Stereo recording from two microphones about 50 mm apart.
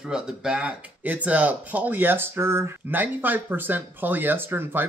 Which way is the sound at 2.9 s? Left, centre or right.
Right.